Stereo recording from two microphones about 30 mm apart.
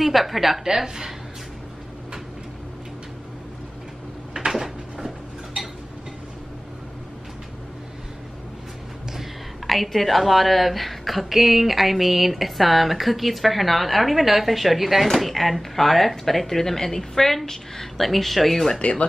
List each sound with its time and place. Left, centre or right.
0.0 s a woman's voice: centre
0.7 s speech: centre
4.5 s a sound: centre
9.7 s a woman's voice: centre
18.8 s speech: left